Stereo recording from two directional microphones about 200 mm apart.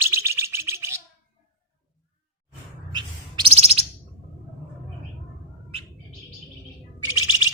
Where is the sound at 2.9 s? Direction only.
25° right (ahead or behind).